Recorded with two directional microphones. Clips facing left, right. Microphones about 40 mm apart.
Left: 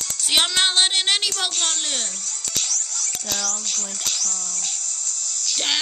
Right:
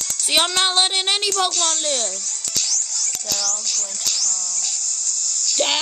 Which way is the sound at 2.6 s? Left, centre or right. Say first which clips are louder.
Right 1 dB; left.